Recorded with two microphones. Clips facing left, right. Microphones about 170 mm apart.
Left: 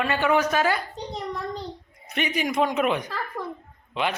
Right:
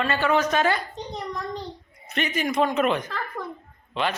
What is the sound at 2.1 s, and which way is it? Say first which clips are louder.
A woman's voice: even; 15° left (ahead or behind).